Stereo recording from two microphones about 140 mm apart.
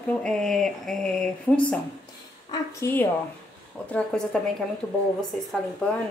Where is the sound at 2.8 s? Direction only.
15° left (ahead or behind).